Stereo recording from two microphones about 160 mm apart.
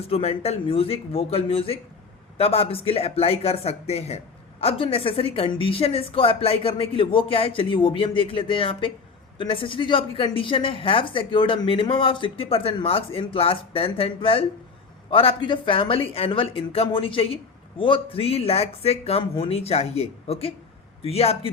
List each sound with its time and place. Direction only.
0.1 s a woman's voice: 40° left (ahead or behind)